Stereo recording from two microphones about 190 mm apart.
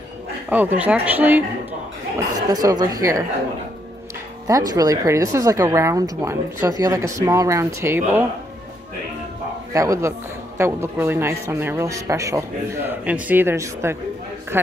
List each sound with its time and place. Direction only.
0.5 s speech: 10° right (ahead or behind)
2.5 s a woman's voice: 20° right (ahead or behind)
4.5 s speech: 20° right (ahead or behind)
9.7 s speech: 15° right (ahead or behind)